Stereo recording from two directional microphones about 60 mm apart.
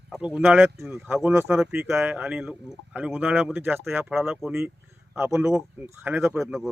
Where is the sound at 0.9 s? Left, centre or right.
Centre.